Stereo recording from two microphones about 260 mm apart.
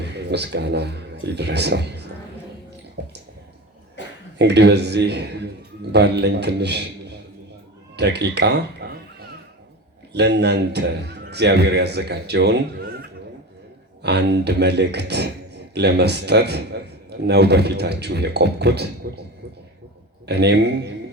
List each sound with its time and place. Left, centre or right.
0.0 s speech: right
3.0 s a sound: right
4.0 s a sound: left
4.4 s speech: right
7.9 s speech: right
10.1 s speech: right
20.2 s speech: right